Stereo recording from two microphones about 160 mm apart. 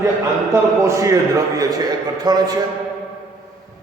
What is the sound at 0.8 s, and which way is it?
A man's voice, 20° right (ahead or behind).